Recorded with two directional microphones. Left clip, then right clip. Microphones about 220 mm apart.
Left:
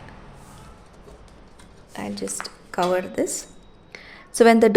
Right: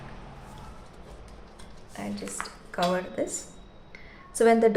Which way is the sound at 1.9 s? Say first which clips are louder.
Left 6 dB; 50° left (ahead or behind).